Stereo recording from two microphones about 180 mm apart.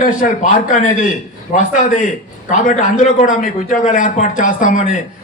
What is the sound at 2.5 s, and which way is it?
A man's voice, 45° left (ahead or behind).